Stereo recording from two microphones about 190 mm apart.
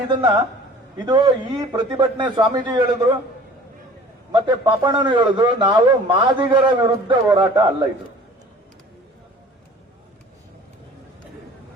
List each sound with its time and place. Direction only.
0.1 s a man's voice: 25° right (ahead or behind)
4.3 s a man's voice: 25° right (ahead or behind)